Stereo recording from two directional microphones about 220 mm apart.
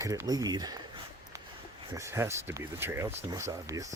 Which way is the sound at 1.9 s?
10° right (ahead or behind).